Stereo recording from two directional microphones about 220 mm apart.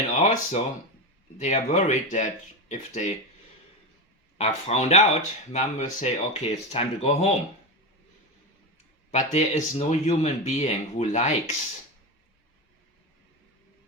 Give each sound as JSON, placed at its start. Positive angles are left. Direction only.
{"t": 0.2, "sound": "a sound", "side_deg": 35}
{"t": 1.4, "sound": "speech", "side_deg": 30}
{"t": 4.4, "sound": "speech", "side_deg": 30}
{"t": 9.1, "sound": "speech", "side_deg": 30}